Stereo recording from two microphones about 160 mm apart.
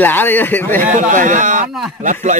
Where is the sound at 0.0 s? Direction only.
10° left (ahead or behind).